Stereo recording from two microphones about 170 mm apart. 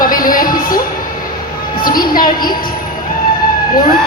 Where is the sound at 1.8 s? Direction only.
55° left (ahead or behind).